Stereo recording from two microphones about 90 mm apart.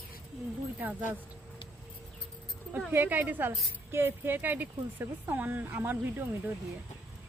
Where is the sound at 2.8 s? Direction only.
20° right (ahead or behind).